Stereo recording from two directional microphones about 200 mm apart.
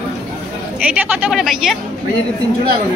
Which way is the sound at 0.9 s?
Centre (ahead or behind).